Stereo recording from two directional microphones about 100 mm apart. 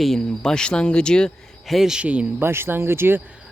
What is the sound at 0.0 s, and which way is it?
Speech, 5° left (ahead or behind).